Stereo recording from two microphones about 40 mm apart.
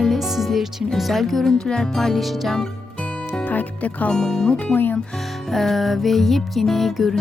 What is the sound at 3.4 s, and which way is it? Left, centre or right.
Speech, left.